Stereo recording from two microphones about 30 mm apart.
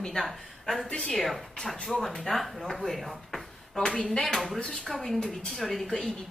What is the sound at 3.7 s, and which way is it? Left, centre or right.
A woman's voice, centre.